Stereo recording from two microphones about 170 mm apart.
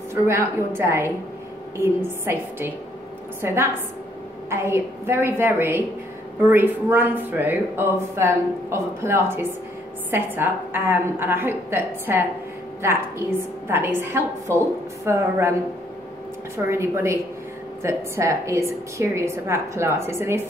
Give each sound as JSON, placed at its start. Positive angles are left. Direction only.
{"t": 0.1, "sound": "speech", "side_deg": -15}
{"t": 13.7, "sound": "speech", "side_deg": -15}
{"t": 16.5, "sound": "speech", "side_deg": -15}